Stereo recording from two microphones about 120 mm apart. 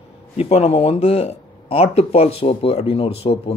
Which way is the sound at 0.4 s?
60° left (ahead or behind).